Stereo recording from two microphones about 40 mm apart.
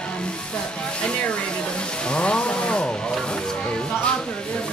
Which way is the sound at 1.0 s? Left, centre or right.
Left.